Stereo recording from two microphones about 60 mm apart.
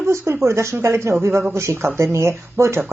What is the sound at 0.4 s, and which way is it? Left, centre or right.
Speech, right.